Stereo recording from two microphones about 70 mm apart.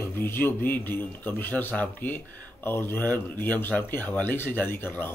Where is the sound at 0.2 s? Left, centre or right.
Left.